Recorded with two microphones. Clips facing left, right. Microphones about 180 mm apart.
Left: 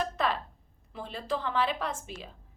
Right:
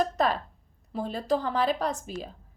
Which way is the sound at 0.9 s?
40° right (ahead or behind).